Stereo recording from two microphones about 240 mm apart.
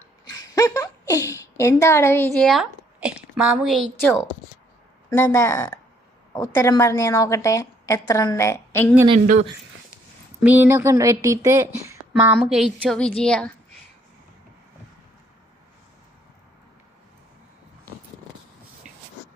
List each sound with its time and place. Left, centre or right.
0.3 s a woman's voice: centre
5.1 s a woman's voice: centre
9.0 s speech: right
10.4 s speech: centre